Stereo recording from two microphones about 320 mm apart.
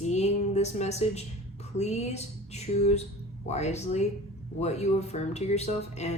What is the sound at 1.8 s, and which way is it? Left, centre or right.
A woman's voice, left.